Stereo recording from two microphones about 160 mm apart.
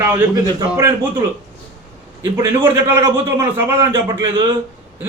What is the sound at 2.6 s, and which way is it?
A man's voice, 15° right (ahead or behind).